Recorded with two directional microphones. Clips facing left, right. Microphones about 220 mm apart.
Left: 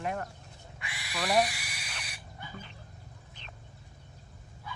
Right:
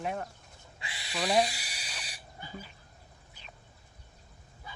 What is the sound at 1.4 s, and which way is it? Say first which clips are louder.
Frog: even; 30° right (ahead or behind).